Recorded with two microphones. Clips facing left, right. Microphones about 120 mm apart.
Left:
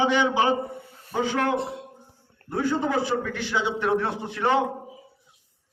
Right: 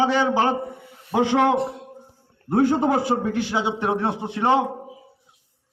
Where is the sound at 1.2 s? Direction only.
85° right.